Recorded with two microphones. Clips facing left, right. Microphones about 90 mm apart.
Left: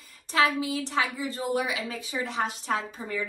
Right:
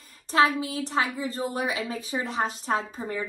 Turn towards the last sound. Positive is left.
turn(degrees=-35)  # may be behind; listen again after turning